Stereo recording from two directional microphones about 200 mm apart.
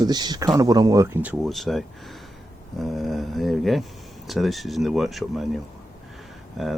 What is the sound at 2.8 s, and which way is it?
Speech, centre (ahead or behind).